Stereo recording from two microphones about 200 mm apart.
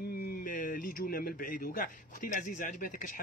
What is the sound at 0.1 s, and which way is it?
A man's voice, 50° left (ahead or behind).